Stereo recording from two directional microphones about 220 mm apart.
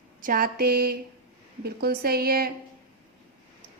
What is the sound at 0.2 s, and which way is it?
A woman's voice, 40° right (ahead or behind).